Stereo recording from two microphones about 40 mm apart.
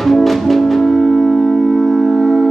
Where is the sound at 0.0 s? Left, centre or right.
Centre.